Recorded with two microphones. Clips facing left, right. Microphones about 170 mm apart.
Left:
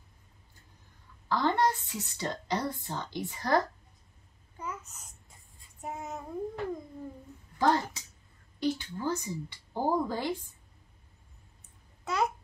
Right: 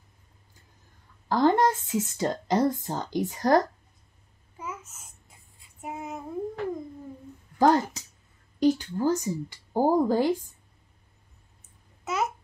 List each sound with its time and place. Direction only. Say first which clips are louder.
1.3 s a woman's voice: right 6 dB; 45° right (ahead or behind)
5.8 s child singing: right 3 dB; 10° right (ahead or behind)
7.5 s a woman's voice: right 6 dB; 45° right (ahead or behind)
12.0 s babbling: right 1 dB; 5° right (ahead or behind)